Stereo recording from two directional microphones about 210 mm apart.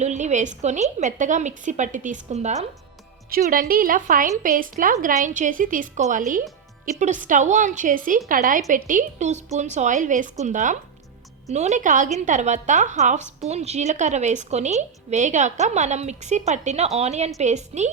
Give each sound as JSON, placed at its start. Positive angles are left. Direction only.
{"t": 0.0, "sound": "a woman's voice", "side_deg": -35}
{"t": 3.2, "sound": "a woman's voice", "side_deg": -45}